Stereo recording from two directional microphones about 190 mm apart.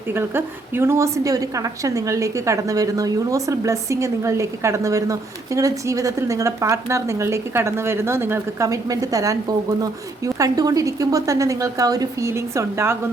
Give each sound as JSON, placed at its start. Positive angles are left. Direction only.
{"t": 0.1, "sound": "a woman's voice", "side_deg": -10}